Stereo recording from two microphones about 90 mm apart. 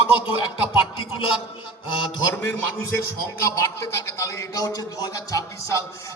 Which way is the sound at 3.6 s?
35° left (ahead or behind).